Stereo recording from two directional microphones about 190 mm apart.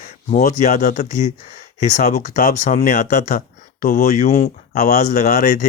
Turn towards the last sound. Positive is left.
turn(degrees=45)  # may be behind; listen again after turning